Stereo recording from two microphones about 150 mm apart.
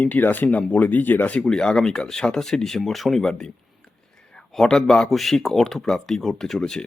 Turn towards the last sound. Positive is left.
turn(degrees=5)  # may be behind; listen again after turning